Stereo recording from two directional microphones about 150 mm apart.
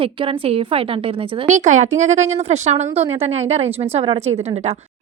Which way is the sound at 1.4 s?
55° right (ahead or behind).